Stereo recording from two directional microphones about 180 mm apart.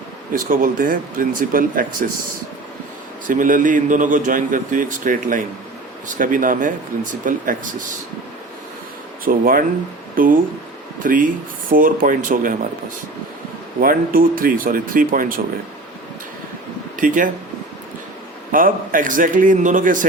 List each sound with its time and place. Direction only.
0.3 s a man's voice: 50° right (ahead or behind)
3.2 s a man's voice: 45° right (ahead or behind)
9.2 s a man's voice: 50° right (ahead or behind)
13.7 s a man's voice: 50° right (ahead or behind)
18.5 s a man's voice: 50° right (ahead or behind)